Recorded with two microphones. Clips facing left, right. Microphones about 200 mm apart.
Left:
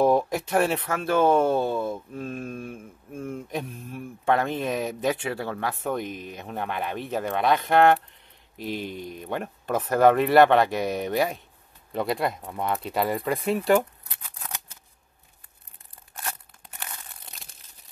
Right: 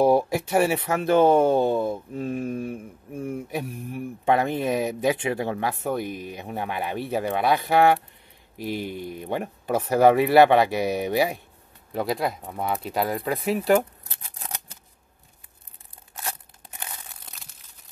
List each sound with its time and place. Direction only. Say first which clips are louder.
0.0 s speech: right 2 dB; 10° right (ahead or behind)
16.7 s crumpling: right 1 dB; 15° right (ahead or behind)